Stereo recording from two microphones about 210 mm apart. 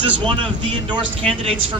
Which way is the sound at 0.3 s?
20° right (ahead or behind).